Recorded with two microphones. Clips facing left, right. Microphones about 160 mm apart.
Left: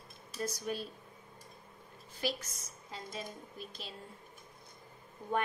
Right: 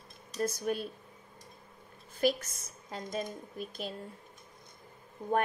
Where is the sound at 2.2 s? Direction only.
50° right (ahead or behind).